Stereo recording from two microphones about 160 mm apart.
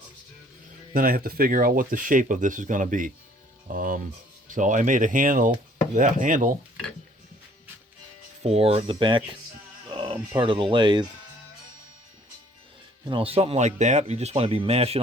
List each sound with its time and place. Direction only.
0.9 s speech: 65° right (ahead or behind)
8.4 s speech: 40° right (ahead or behind)
13.1 s speech: 35° right (ahead or behind)